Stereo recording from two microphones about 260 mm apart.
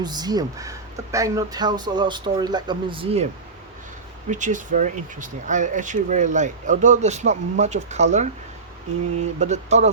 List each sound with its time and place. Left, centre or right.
0.0 s speech: centre
4.3 s speech: right
9.4 s speech: right